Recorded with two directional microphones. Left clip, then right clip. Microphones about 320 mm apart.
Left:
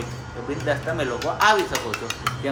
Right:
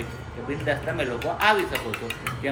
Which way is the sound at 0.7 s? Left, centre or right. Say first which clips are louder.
Left 2 dB; centre.